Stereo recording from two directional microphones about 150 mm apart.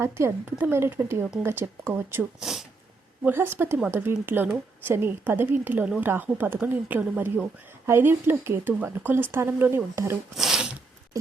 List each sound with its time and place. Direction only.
0.0 s speech: 15° right (ahead or behind)
2.4 s speech: centre (ahead or behind)
3.2 s speech: 15° right (ahead or behind)
10.3 s speech: 5° right (ahead or behind)